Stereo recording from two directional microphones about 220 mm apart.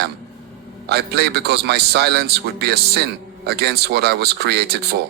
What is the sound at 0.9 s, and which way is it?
A man's voice, 45° right (ahead or behind).